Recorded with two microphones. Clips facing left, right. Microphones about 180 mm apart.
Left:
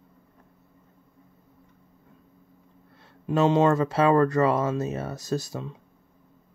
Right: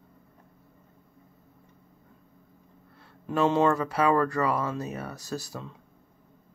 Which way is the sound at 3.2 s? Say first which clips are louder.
Left 3 dB; 20° left (ahead or behind).